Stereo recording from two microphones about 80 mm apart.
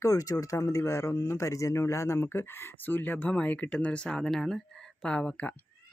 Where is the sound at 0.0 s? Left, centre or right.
Left.